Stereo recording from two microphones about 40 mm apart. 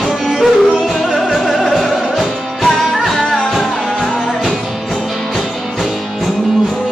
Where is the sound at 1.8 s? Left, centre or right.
Centre.